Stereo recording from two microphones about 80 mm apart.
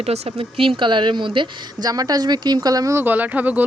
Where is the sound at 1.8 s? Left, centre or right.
Right.